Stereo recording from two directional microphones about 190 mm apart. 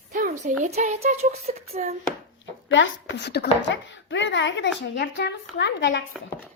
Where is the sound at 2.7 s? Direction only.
80° left.